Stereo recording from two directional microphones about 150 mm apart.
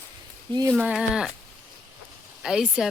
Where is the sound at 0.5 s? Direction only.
30° right (ahead or behind).